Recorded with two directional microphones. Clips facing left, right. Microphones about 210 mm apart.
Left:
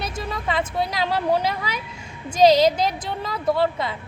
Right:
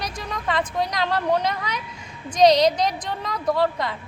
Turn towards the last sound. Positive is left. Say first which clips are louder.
# left 1 dB
turn(degrees=5)  # may be behind; listen again after turning